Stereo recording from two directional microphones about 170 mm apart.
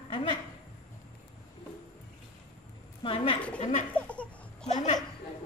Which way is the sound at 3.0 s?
35° left (ahead or behind).